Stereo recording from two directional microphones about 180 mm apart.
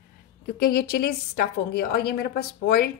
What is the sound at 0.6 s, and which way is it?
A woman's voice, 60° left (ahead or behind).